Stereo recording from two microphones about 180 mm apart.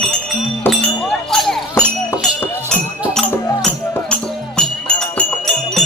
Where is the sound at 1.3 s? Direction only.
Centre (ahead or behind).